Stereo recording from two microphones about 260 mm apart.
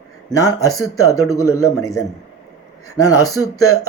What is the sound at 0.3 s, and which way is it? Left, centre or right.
Speech, centre.